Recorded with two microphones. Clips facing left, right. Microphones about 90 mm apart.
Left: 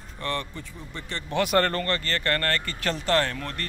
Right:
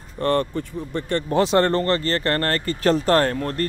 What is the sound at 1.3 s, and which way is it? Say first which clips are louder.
Speech: right 5 dB; 25° right (ahead or behind).